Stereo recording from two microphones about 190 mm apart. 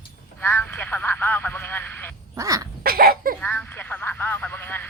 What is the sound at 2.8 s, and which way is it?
Cough, 50° right (ahead or behind).